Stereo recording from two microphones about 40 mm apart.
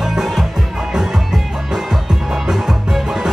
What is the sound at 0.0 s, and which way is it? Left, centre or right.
Music, centre.